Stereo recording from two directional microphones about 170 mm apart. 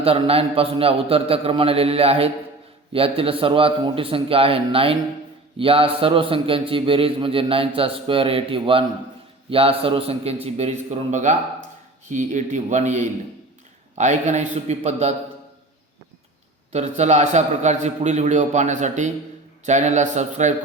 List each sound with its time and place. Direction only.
0.0 s a man's voice: 35° right (ahead or behind)
16.7 s a man's voice: 40° right (ahead or behind)